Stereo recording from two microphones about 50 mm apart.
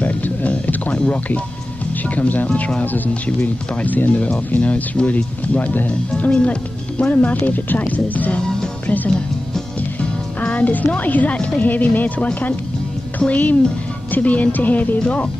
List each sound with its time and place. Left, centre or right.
0.0 s music: left
0.9 s speech: left
10.4 s speech: left
13.3 s speech: left